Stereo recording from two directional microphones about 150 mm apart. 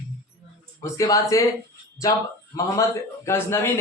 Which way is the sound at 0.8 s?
25° left (ahead or behind).